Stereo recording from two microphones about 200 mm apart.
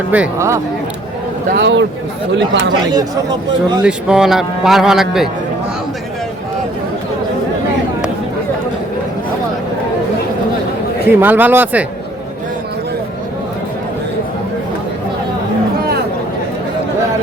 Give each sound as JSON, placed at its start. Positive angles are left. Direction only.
{"t": 0.1, "sound": "speech", "side_deg": -10}
{"t": 1.5, "sound": "speech", "side_deg": -60}
{"t": 2.9, "sound": "speech", "side_deg": -20}
{"t": 3.8, "sound": "speech", "side_deg": -5}
{"t": 11.1, "sound": "speech", "side_deg": -10}